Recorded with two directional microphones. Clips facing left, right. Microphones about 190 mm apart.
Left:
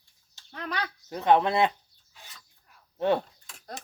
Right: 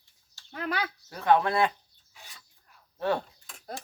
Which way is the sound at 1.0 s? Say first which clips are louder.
Left 2 dB; 20° left (ahead or behind).